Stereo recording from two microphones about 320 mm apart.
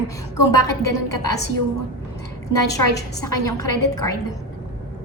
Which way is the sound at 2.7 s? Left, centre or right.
Centre.